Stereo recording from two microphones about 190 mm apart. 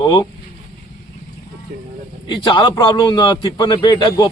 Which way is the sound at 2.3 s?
25° left (ahead or behind).